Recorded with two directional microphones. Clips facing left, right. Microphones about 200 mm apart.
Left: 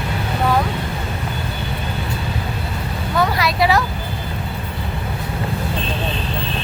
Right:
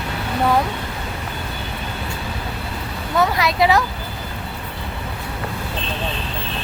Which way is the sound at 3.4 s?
20° right (ahead or behind).